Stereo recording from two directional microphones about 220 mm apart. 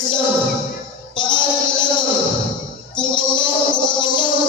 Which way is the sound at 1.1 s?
20° left (ahead or behind).